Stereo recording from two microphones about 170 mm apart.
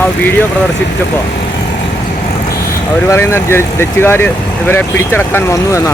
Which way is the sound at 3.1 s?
15° left (ahead or behind).